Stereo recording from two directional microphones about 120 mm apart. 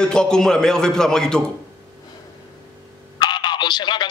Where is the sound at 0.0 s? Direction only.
5° left (ahead or behind).